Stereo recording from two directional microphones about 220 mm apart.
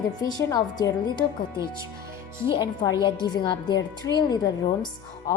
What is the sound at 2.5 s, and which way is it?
Speech, 20° left (ahead or behind).